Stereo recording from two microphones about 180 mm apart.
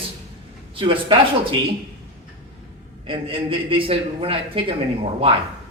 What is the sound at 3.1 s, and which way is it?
A man's voice, 30° right (ahead or behind).